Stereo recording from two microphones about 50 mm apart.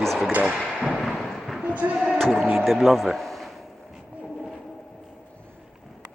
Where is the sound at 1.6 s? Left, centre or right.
Right.